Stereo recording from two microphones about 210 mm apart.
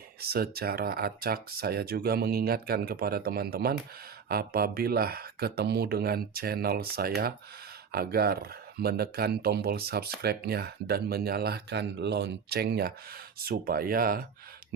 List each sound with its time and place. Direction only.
0.2 s speech: 45° right (ahead or behind)